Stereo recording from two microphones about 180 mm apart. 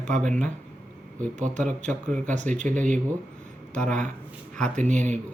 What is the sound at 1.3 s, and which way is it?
Speech, 45° right (ahead or behind).